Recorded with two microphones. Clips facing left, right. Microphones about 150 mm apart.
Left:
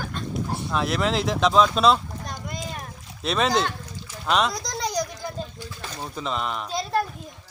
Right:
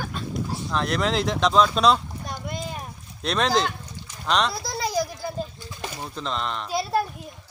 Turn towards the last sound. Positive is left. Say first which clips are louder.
# right 1 dB
turn(degrees=-10)  # may be behind; listen again after turning